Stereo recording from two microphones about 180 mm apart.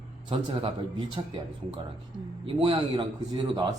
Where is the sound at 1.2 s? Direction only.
25° right (ahead or behind).